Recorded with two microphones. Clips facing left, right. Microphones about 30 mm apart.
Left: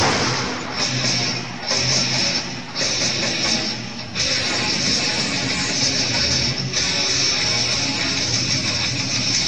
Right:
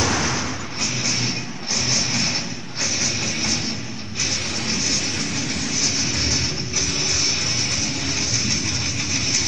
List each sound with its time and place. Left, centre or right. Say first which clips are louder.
0.0 s music: left 2 dB; left
3.2 s music: left 3 dB; left
4.4 s music: left 4 dB; left
4.7 s music: left 2 dB; left
5.0 s music: left 3 dB; left
5.8 s music: left 2 dB; left
6.8 s music: left 3 dB; left
7.1 s music: left 2 dB; left
7.3 s music: left 3 dB; left
9.1 s vehicle: right 1 dB; left